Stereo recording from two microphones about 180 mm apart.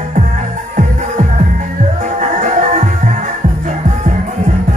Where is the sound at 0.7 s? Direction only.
45° right (ahead or behind).